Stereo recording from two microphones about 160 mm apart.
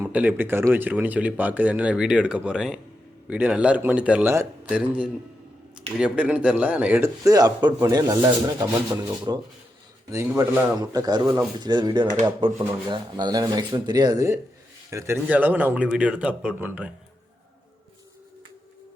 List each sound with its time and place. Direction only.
0.0 s speech: 10° right (ahead or behind)
6.0 s speech: 5° right (ahead or behind)
7.3 s speech: 25° right (ahead or behind)